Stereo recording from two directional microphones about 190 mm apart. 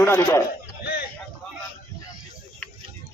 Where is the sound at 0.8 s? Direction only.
60° left (ahead or behind).